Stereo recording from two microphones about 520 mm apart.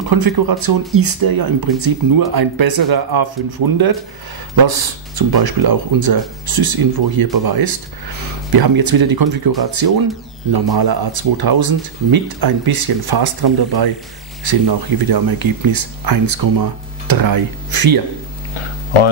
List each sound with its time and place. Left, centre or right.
0.1 s speech: right